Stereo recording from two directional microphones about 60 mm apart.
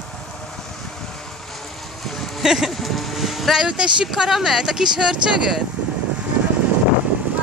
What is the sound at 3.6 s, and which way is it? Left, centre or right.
Speech, centre.